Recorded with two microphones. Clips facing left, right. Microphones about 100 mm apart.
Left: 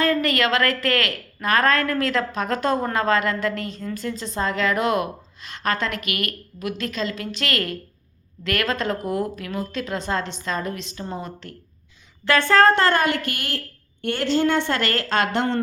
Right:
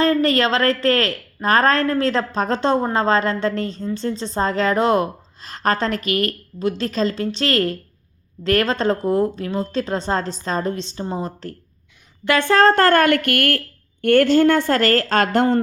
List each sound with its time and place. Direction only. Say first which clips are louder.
0.0 s a woman's voice: right 4 dB; 30° right (ahead or behind)
12.2 s a woman's voice: right 1 dB; 20° right (ahead or behind)
12.7 s a woman's voice: right 5 dB; 45° right (ahead or behind)